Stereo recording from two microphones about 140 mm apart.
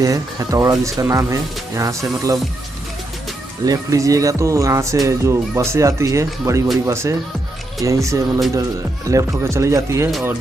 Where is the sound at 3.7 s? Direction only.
25° right (ahead or behind).